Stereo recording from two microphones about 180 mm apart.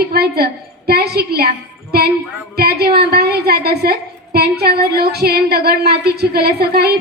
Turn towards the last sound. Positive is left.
turn(degrees=-60)  # may be behind; listen again after turning